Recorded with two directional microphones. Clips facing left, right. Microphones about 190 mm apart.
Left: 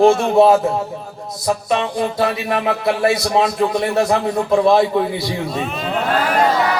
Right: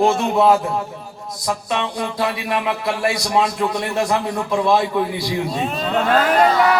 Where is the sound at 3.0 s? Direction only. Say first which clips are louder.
Left 2 dB; 25° left (ahead or behind).